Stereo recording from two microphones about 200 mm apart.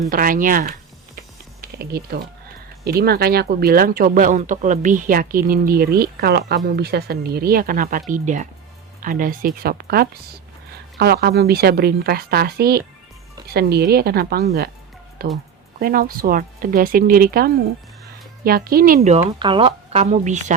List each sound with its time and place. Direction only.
0.1 s speech: 45° right (ahead or behind)
19.1 s speech: 25° right (ahead or behind)